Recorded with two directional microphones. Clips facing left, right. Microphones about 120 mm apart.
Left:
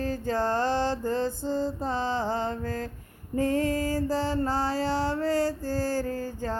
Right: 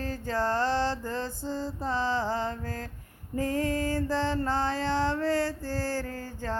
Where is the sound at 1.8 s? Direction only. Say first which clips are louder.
Left 1 dB; 15° left (ahead or behind).